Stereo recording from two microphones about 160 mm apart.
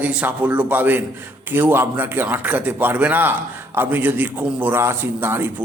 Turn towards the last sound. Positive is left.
turn(degrees=-15)  # may be behind; listen again after turning